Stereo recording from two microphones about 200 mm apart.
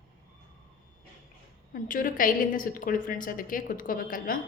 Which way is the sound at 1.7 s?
45° left (ahead or behind).